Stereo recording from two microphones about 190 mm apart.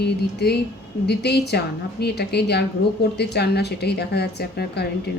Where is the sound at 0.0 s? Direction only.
60° left (ahead or behind).